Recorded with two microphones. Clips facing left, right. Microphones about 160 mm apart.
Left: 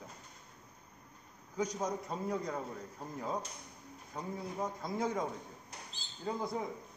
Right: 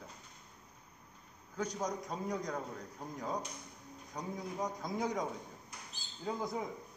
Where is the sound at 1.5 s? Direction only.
5° left (ahead or behind).